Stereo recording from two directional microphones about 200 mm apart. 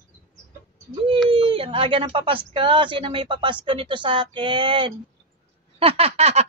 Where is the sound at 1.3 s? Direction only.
30° right (ahead or behind).